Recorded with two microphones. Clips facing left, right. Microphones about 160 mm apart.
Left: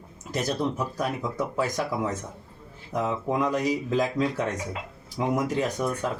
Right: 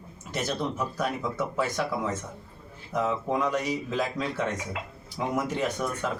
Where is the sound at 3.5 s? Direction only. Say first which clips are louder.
Left 4 dB; 35° left (ahead or behind).